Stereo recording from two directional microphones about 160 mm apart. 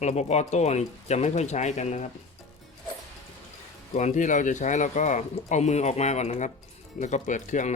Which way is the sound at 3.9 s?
50° left (ahead or behind).